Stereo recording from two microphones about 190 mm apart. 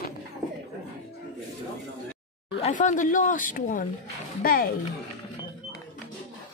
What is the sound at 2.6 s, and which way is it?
Speech, 35° left (ahead or behind).